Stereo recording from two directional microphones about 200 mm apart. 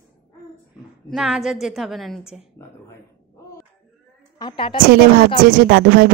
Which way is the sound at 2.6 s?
15° left (ahead or behind).